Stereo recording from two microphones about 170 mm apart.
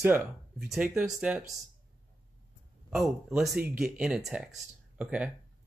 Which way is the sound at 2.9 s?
Centre (ahead or behind).